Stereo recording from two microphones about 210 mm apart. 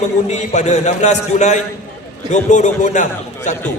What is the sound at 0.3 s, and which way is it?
A man's voice, 35° left (ahead or behind).